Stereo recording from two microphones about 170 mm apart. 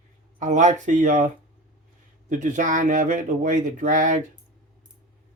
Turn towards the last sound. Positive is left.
turn(degrees=-50)  # may be behind; listen again after turning